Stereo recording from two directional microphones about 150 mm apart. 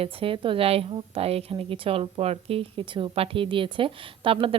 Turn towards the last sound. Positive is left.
turn(degrees=-40)  # may be behind; listen again after turning